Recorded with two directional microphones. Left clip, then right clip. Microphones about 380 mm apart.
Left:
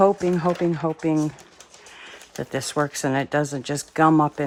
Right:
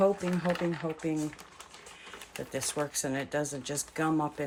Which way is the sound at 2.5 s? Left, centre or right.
Centre.